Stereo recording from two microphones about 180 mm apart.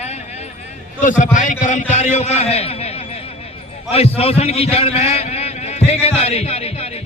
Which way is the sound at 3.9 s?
35° left (ahead or behind).